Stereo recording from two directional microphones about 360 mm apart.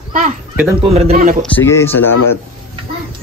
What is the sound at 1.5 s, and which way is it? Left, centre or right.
Speech, centre.